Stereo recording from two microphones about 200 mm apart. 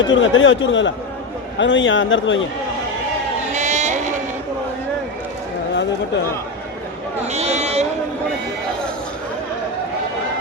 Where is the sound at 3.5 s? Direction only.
35° right (ahead or behind).